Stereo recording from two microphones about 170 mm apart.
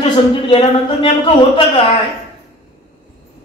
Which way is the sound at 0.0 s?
35° left (ahead or behind).